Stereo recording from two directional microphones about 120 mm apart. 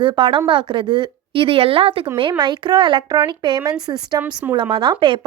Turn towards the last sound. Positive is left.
turn(degrees=-40)  # may be behind; listen again after turning